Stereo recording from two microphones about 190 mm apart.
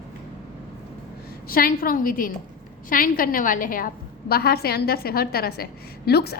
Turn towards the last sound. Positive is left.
turn(degrees=55)  # may be behind; listen again after turning